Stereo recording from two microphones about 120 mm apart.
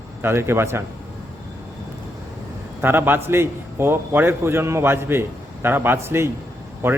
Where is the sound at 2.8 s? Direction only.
15° right (ahead or behind).